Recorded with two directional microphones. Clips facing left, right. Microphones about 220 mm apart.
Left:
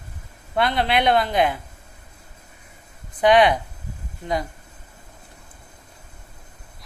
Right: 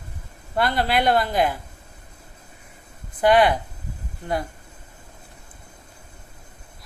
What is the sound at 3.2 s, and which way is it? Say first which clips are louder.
Speech: left 1 dB; 5° right (ahead or behind).